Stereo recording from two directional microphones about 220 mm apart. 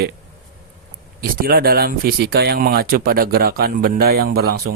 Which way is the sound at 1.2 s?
40° right (ahead or behind).